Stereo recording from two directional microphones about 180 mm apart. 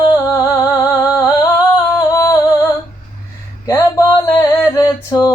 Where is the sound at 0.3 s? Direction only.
15° left (ahead or behind).